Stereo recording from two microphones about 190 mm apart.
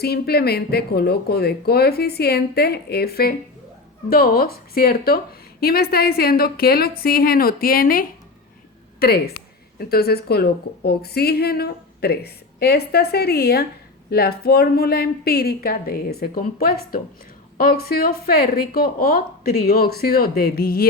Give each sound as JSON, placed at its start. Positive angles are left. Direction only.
{"t": 0.0, "sound": "a woman's voice", "side_deg": 55}